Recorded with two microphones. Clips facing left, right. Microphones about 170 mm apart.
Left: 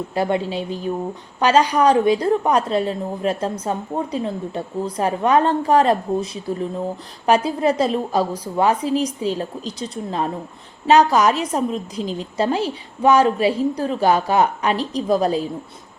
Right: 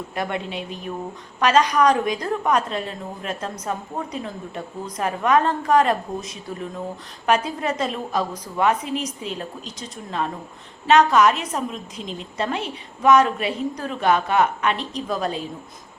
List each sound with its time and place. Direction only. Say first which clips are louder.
0.1 s a woman's voice: left 7 dB; 30° left (ahead or behind)